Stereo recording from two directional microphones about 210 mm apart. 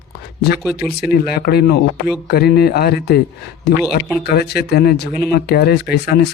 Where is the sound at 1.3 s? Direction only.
50° left (ahead or behind).